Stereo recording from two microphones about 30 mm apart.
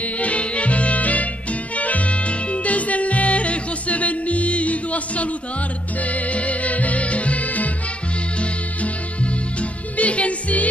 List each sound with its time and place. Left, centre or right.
0.0 s music: left
8.4 s music: left